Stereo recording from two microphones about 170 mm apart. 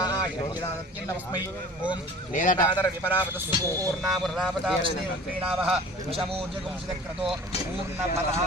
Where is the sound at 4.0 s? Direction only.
Centre (ahead or behind).